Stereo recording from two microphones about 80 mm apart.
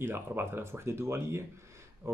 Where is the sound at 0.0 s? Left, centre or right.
Right.